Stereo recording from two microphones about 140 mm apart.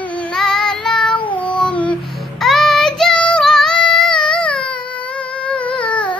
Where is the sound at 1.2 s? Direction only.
35° left (ahead or behind).